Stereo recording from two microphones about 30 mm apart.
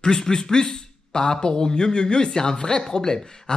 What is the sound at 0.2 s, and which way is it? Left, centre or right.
A man's voice, left.